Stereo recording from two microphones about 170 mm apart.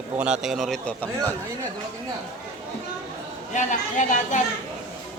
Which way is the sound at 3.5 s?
45° left (ahead or behind).